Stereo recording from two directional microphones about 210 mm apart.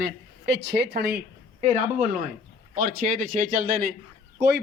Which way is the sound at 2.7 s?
40° right (ahead or behind).